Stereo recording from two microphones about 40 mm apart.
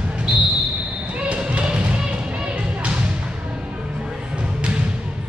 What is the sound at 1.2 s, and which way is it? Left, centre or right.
Basketball bounce, right.